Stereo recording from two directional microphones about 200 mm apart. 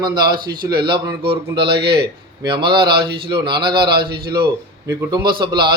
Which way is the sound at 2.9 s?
50° right (ahead or behind).